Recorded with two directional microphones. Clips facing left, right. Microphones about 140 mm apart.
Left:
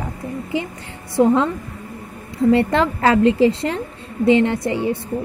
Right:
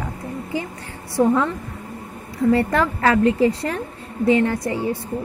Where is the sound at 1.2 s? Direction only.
20° left (ahead or behind).